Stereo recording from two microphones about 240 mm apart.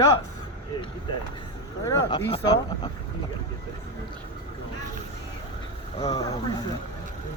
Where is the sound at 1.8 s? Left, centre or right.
Centre.